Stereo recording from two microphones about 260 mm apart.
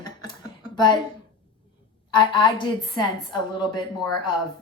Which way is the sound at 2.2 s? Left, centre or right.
Centre.